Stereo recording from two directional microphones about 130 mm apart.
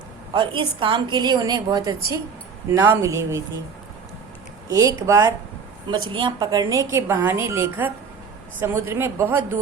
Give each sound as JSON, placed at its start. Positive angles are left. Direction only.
{"t": 0.3, "sound": "a woman's voice", "side_deg": -40}
{"t": 4.7, "sound": "speech", "side_deg": -30}
{"t": 5.9, "sound": "speech", "side_deg": -40}